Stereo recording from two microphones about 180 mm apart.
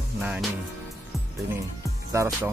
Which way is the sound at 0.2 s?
5° right (ahead or behind).